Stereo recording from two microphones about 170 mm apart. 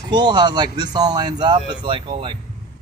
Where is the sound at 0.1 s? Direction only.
25° right (ahead or behind).